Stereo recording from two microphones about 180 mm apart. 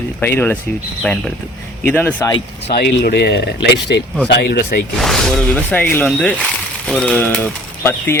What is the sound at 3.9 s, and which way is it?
Speech, 80° left.